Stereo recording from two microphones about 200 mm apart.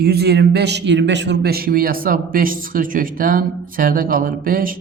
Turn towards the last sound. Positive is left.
turn(degrees=-45)  # may be behind; listen again after turning